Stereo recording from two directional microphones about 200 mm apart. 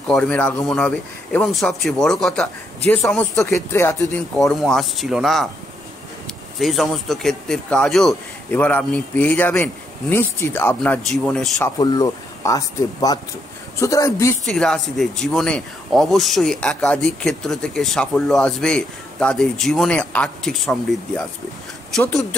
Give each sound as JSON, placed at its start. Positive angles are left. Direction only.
{"t": 0.1, "sound": "speech", "side_deg": 5}
{"t": 4.4, "sound": "speech", "side_deg": 0}
{"t": 6.6, "sound": "speech", "side_deg": 0}
{"t": 11.8, "sound": "speech", "side_deg": 20}
{"t": 14.4, "sound": "speech", "side_deg": 5}